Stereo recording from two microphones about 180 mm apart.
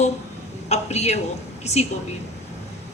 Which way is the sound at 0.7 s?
40° left (ahead or behind).